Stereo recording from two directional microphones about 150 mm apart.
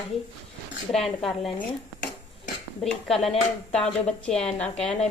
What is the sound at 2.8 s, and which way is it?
A woman's voice, centre (ahead or behind).